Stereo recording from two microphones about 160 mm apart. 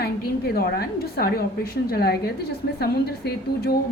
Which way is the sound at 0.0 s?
75° left (ahead or behind).